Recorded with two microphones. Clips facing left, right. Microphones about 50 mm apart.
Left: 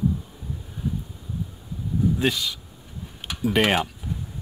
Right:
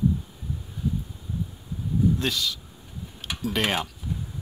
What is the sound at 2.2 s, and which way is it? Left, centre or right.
Speech, centre.